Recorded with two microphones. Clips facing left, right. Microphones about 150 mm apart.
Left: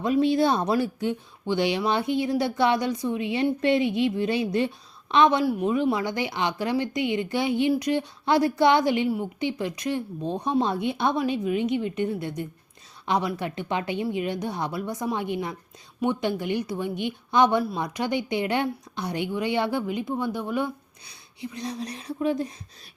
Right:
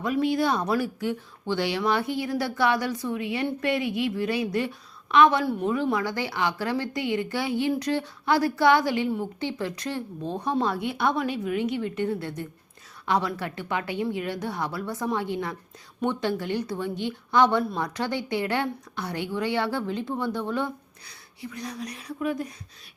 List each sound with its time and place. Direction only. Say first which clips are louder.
0.0 s speech: left 3 dB; 25° left (ahead or behind)